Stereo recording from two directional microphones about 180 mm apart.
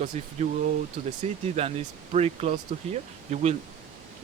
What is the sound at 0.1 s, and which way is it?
Speech, 40° right (ahead or behind).